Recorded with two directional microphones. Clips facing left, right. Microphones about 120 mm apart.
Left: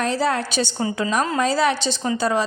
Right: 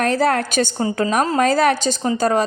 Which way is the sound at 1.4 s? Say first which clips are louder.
Right 5 dB; 50° right (ahead or behind).